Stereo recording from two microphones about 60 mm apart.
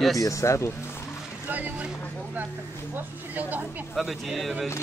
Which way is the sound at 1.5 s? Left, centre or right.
Right.